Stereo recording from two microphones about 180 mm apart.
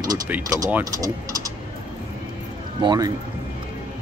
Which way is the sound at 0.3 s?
15° right (ahead or behind).